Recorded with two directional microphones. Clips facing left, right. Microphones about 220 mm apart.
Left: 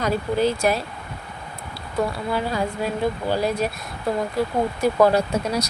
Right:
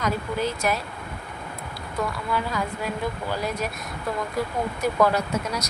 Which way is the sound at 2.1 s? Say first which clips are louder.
Left 3 dB; 30° left (ahead or behind).